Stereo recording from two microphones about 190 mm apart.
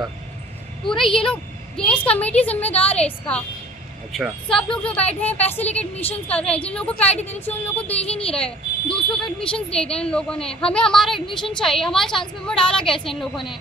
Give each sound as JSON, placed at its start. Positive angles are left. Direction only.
{"t": 0.8, "sound": "speech", "side_deg": 0}
{"t": 11.1, "sound": "a woman's voice", "side_deg": 25}
{"t": 11.5, "sound": "speech", "side_deg": 0}